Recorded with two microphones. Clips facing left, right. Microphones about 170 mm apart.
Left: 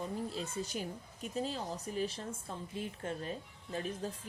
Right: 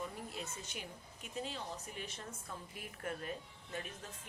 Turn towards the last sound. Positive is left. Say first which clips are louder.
# left 8 dB
turn(degrees=35)  # may be behind; listen again after turning